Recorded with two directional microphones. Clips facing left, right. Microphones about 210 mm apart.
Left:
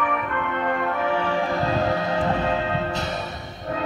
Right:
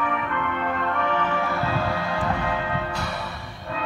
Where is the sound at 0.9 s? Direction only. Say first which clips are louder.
Left 2 dB; 10° left (ahead or behind).